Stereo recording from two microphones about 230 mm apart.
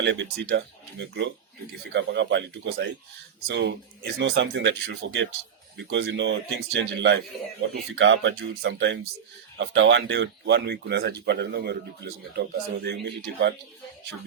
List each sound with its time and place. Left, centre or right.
0.0 s speech: right